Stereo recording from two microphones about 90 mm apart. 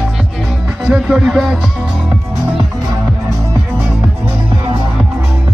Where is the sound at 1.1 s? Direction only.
5° right (ahead or behind).